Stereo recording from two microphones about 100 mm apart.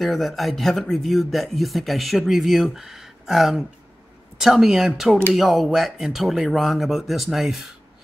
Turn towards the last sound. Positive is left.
turn(degrees=-5)  # may be behind; listen again after turning